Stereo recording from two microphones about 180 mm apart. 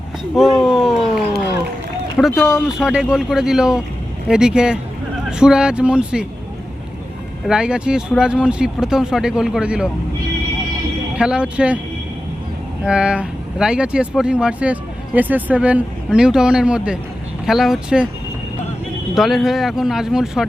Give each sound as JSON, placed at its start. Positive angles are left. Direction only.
{"t": 0.3, "sound": "a sound", "side_deg": 0}
{"t": 2.1, "sound": "speech", "side_deg": 0}
{"t": 7.4, "sound": "speech", "side_deg": -5}
{"t": 11.2, "sound": "speech", "side_deg": -5}
{"t": 12.8, "sound": "speech", "side_deg": -5}
{"t": 19.1, "sound": "speech", "side_deg": 0}